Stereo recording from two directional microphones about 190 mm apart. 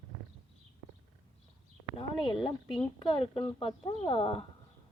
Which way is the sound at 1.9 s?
25° left (ahead or behind).